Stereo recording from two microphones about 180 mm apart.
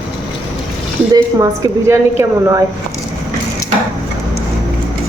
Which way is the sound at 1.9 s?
15° right (ahead or behind).